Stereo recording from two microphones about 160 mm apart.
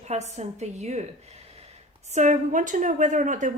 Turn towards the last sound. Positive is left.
turn(degrees=-50)  # may be behind; listen again after turning